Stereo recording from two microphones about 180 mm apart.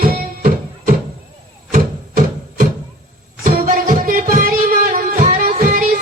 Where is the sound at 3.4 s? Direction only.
50° right (ahead or behind).